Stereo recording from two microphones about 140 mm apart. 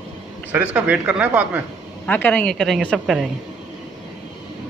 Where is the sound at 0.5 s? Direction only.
10° right (ahead or behind).